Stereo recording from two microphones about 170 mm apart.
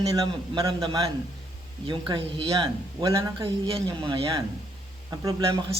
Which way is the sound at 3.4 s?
30° right (ahead or behind).